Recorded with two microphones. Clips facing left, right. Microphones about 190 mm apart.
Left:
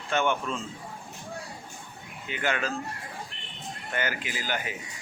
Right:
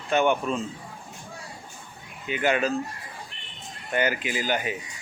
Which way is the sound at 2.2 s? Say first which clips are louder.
Right 6 dB; 15° right (ahead or behind).